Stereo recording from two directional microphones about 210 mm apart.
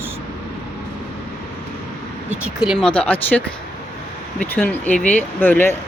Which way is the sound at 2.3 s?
5° right (ahead or behind).